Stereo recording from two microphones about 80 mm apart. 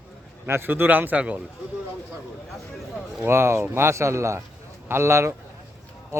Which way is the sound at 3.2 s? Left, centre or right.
Right.